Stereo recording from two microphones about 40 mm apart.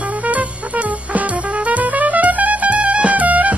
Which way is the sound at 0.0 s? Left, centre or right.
Right.